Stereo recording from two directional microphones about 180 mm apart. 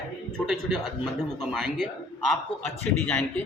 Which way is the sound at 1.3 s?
Centre (ahead or behind).